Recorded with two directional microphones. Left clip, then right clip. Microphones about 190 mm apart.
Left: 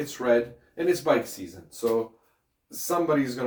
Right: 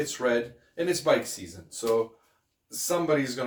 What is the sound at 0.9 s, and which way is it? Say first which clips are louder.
Speech: left 1 dB; 15° right (ahead or behind).